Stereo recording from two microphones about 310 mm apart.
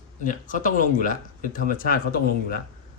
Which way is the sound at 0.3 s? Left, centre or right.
Left.